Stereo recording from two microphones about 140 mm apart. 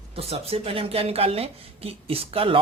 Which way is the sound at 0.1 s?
45° right (ahead or behind).